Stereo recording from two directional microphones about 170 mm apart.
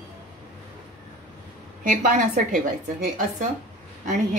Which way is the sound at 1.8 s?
50° right (ahead or behind).